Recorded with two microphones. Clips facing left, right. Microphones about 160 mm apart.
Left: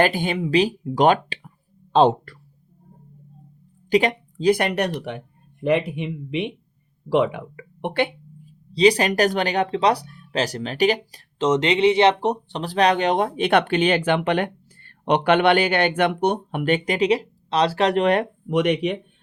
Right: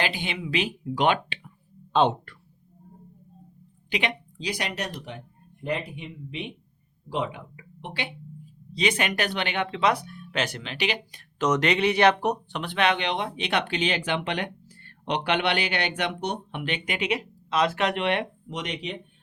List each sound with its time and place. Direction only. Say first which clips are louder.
0.0 s speech: left 9 dB; 45° left (ahead or behind)
3.8 s speech: left 10 dB; 40° left (ahead or behind); by 8.1 s 55° left (ahead or behind)
8.7 s speech: left 9 dB; 35° left (ahead or behind)
11.3 s speech: left 4 dB; 25° left (ahead or behind); by 18.3 s 40° left (ahead or behind)
18.4 s speech: left 13 dB; 60° left (ahead or behind)